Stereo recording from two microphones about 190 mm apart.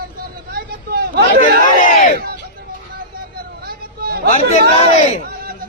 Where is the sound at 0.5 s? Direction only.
55° right (ahead or behind).